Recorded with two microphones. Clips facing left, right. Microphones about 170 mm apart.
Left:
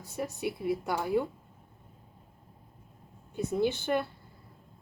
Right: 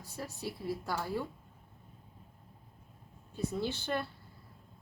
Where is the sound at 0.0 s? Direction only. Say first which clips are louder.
Left 7 dB; 20° left (ahead or behind).